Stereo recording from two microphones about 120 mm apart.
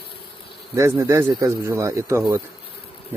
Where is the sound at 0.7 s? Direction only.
25° right (ahead or behind).